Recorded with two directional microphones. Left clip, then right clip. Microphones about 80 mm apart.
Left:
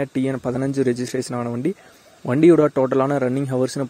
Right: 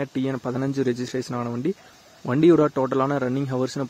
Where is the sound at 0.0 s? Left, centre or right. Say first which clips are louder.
Left 4 dB; left.